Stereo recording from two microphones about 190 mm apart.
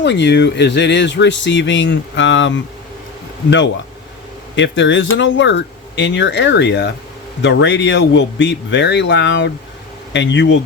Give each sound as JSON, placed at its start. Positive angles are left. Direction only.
{"t": 0.0, "sound": "speech", "side_deg": 65}
{"t": 4.5, "sound": "speech", "side_deg": 70}